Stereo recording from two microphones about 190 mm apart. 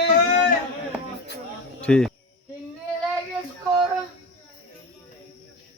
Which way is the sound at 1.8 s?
5° left (ahead or behind).